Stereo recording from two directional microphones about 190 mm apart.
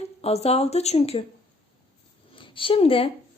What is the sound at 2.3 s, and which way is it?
Speech, 25° left (ahead or behind).